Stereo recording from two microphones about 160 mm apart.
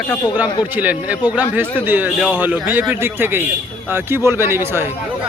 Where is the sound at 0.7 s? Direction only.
10° right (ahead or behind).